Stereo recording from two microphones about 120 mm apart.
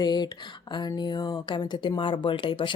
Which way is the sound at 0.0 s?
35° left (ahead or behind).